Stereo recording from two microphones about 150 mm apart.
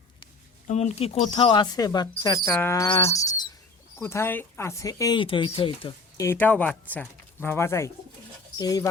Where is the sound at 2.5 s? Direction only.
15° left (ahead or behind).